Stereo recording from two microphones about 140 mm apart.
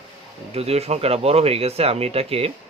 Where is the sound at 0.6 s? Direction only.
45° right (ahead or behind).